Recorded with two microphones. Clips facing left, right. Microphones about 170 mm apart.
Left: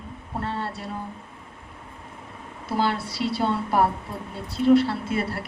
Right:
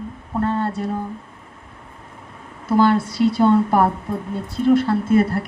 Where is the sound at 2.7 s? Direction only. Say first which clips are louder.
Right 9 dB; 50° right (ahead or behind).